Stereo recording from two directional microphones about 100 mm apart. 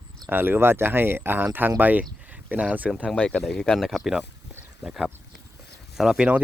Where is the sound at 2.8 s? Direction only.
10° right (ahead or behind).